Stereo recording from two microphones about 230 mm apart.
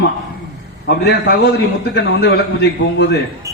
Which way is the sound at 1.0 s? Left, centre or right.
Left.